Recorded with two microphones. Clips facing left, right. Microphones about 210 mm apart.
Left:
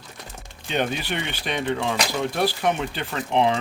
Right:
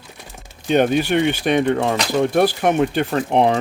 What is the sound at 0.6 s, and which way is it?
Speech, 50° right (ahead or behind).